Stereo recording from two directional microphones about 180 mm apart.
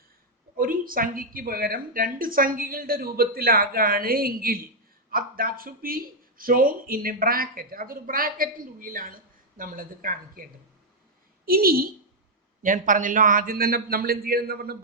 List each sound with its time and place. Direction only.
0.5 s a man's voice: 50° right (ahead or behind)